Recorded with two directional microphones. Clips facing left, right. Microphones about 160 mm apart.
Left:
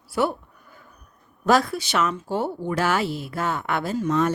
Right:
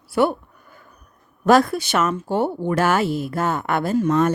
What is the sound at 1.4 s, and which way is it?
Speech, 55° right (ahead or behind).